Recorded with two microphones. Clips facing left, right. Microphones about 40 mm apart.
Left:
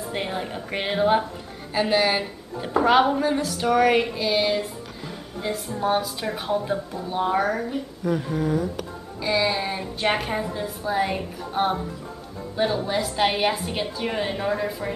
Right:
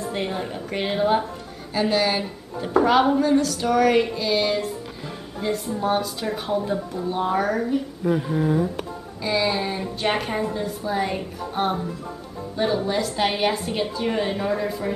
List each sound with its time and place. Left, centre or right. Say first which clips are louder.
0.1 s music: left 2 dB; centre
1.7 s a woman's voice: even; centre
3.2 s music: right 4 dB; centre
8.0 s a sound: even; centre
9.2 s a woman's voice: even; centre